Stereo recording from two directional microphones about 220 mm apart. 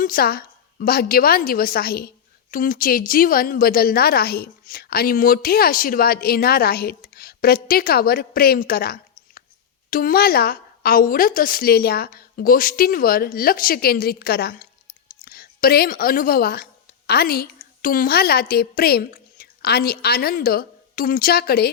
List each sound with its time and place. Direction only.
0.0 s a woman's voice: 40° left (ahead or behind)